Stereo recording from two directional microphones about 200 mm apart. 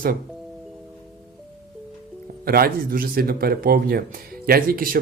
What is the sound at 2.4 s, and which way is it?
Speech, 50° right (ahead or behind).